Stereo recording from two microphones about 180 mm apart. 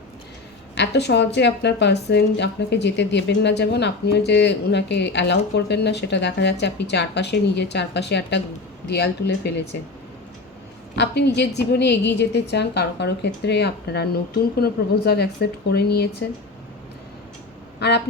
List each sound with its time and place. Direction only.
0.8 s a woman's voice: 70° left (ahead or behind)
10.9 s a woman's voice: 70° left (ahead or behind)
17.7 s a sound: 70° left (ahead or behind)